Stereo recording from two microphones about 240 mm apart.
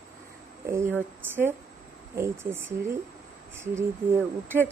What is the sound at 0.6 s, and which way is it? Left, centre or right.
A woman's voice, centre.